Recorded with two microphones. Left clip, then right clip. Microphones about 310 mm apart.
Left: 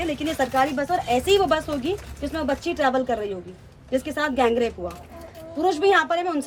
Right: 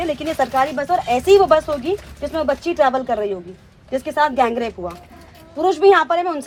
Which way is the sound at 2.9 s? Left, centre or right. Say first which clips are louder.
Right 4 dB; centre.